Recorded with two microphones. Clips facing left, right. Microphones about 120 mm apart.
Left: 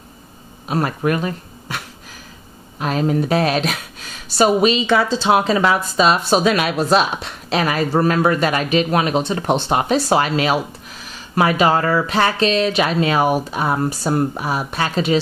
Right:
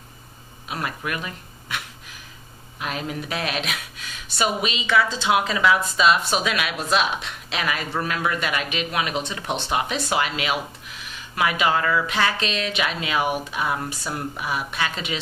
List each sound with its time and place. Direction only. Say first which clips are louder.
0.7 s speech: left 10 dB; 40° left (ahead or behind)
2.8 s speech: left 11 dB; 40° left (ahead or behind)